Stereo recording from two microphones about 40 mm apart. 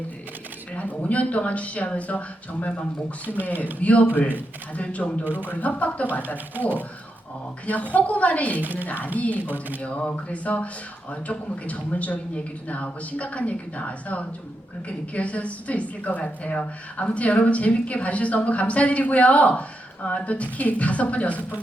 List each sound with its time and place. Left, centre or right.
0.8 s a woman's voice: left
3.8 s a woman's voice: left
5.2 s speech: right
5.5 s a woman's voice: left
7.7 s a woman's voice: left
8.6 s speech: right
9.1 s a woman's voice: left
9.4 s speech: right
9.8 s a woman's voice: left